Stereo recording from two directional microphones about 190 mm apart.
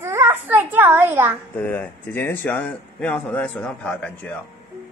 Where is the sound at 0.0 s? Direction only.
15° right (ahead or behind).